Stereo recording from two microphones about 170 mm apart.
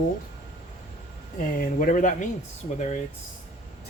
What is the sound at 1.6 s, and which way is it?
Speech, 55° left (ahead or behind).